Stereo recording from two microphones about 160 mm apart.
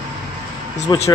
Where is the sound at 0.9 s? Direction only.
30° left (ahead or behind).